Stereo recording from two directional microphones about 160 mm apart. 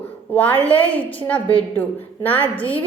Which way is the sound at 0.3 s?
10° left (ahead or behind).